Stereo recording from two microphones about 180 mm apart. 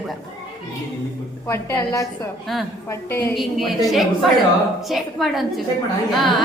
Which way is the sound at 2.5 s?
Centre (ahead or behind).